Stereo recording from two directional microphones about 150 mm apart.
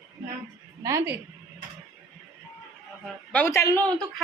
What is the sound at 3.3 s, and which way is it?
Speech, 15° left (ahead or behind).